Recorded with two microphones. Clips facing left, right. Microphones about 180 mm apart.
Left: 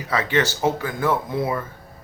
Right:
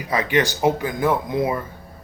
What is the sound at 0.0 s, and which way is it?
Speech, 15° right (ahead or behind).